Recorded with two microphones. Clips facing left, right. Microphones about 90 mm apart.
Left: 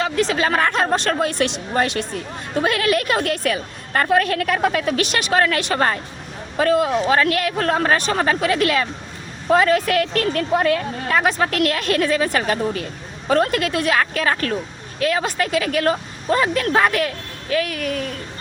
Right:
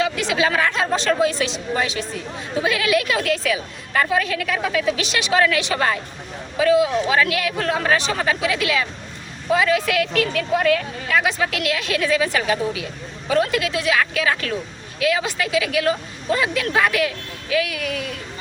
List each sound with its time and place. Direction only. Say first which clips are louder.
0.0 s a woman's voice: left 1 dB; 40° left (ahead or behind)